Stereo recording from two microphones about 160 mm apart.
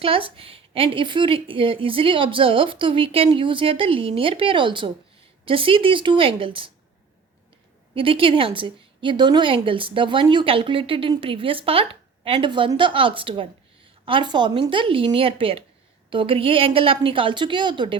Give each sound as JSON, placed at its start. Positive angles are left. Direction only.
{"t": 0.0, "sound": "a woman's voice", "side_deg": -35}
{"t": 7.9, "sound": "a woman's voice", "side_deg": -35}